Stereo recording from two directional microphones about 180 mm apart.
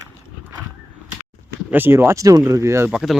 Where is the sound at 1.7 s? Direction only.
10° right (ahead or behind).